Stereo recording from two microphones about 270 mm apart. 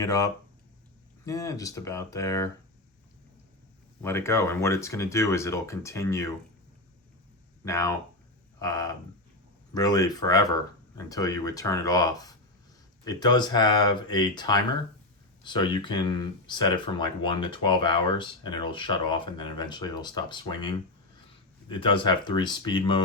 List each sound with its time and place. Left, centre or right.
0.0 s speech: centre
4.0 s speech: centre
7.6 s speech: centre